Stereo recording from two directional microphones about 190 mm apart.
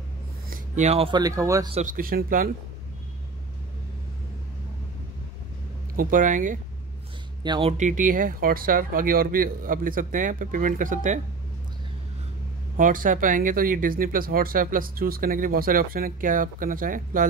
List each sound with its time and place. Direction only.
0.5 s speech: 35° right (ahead or behind); by 1.7 s 15° right (ahead or behind)
1.7 s speech: 35° right (ahead or behind)
2.0 s speech: 50° right (ahead or behind)
5.9 s speech: 45° right (ahead or behind)
7.4 s speech: 25° right (ahead or behind)
7.7 s speech: 40° right (ahead or behind)
12.7 s speech: 45° right (ahead or behind)